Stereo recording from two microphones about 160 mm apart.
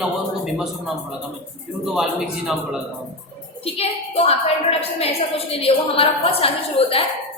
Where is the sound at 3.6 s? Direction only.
40° left (ahead or behind).